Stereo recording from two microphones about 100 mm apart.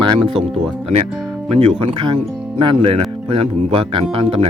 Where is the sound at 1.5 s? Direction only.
80° right.